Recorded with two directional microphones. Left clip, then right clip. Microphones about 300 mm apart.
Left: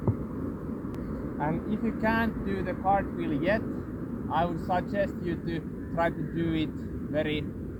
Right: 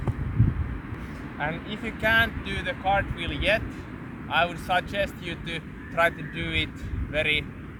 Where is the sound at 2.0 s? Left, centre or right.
Centre.